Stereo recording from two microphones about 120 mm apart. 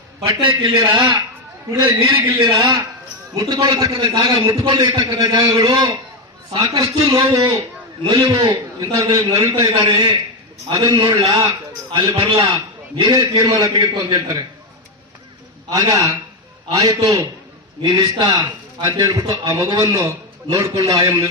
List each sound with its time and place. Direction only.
0.6 s a man's voice: 35° right (ahead or behind)
2.0 s a man's voice: 45° right (ahead or behind)
2.6 s a man's voice: 30° right (ahead or behind)
15.7 s a man's voice: 30° right (ahead or behind)